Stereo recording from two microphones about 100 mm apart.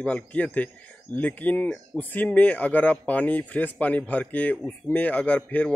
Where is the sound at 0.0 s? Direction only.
15° left (ahead or behind).